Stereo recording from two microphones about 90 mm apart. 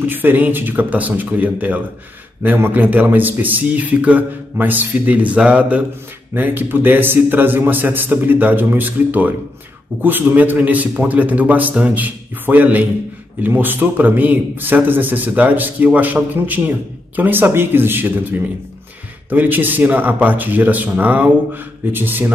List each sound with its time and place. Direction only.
0.0 s a man's voice: 20° right (ahead or behind)